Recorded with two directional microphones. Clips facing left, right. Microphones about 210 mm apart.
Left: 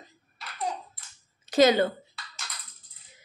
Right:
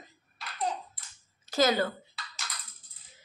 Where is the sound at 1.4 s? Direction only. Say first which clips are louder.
Left 6 dB; 20° left (ahead or behind).